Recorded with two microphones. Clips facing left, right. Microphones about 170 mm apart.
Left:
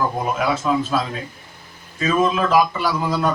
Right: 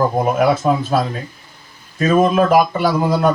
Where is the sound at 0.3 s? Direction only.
50° right (ahead or behind).